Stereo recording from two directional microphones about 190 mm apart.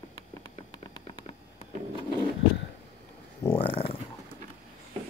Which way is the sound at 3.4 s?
20° left (ahead or behind).